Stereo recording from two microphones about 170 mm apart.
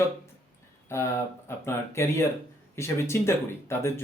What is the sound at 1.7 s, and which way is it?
Speech, 15° left (ahead or behind).